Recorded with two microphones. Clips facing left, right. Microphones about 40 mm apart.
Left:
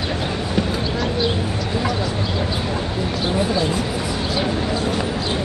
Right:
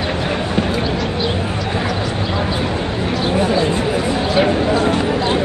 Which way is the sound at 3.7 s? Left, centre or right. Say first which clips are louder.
Right 5 dB; right.